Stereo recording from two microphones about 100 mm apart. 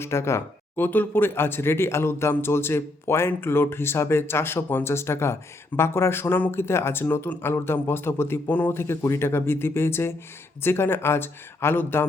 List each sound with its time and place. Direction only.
0.0 s speech: 25° left (ahead or behind)